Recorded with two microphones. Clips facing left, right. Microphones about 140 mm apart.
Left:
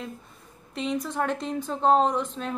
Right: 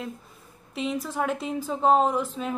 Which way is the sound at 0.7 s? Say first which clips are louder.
Even; 5° right (ahead or behind).